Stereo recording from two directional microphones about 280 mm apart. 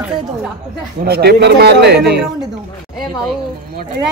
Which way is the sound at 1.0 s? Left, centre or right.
Right.